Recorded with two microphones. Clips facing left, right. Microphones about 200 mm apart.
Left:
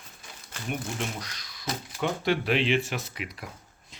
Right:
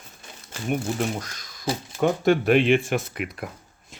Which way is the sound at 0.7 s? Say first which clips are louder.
Right 7 dB; 45° right (ahead or behind).